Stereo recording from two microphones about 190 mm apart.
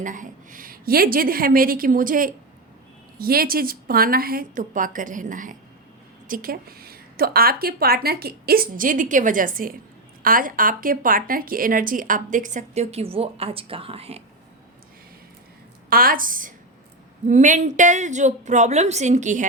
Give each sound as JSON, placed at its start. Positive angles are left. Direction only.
{"t": 0.0, "sound": "speech", "side_deg": -45}
{"t": 15.9, "sound": "a woman's voice", "side_deg": -50}